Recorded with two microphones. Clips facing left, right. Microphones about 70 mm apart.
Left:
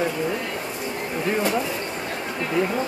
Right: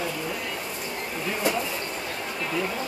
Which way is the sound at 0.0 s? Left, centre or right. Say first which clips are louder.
Left 6 dB; left.